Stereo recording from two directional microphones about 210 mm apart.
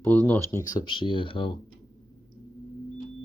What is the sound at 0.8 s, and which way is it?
Speech, 25° left (ahead or behind).